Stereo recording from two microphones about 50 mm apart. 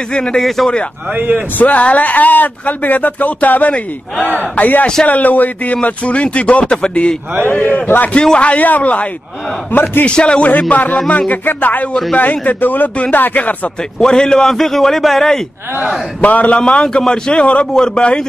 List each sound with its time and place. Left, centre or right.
0.1 s a man's voice: centre
0.4 s speech: centre
1.1 s a man's voice: right
1.6 s a man's voice: left
7.6 s speech: left
8.1 s a man's voice: left
9.7 s a man's voice: left
10.0 s a man's voice: left
10.7 s speech: left
13.9 s a man's voice: centre
16.2 s a man's voice: left